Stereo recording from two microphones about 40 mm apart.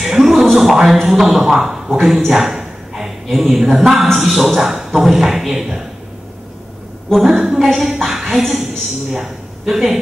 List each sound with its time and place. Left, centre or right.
0.0 s music: centre
1.0 s a man's voice: centre
2.0 s a sound: centre
3.3 s a man's voice: centre
7.2 s a man's voice: centre